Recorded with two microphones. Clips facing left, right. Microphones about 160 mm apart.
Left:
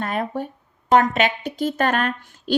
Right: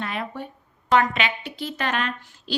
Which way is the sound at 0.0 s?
45° left (ahead or behind).